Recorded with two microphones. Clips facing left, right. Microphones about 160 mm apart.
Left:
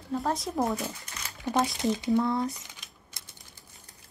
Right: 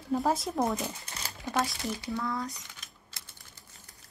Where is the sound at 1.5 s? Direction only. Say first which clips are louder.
Left 5 dB; 20° left (ahead or behind).